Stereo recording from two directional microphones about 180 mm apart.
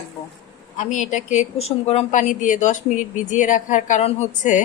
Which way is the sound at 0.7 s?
40° left (ahead or behind).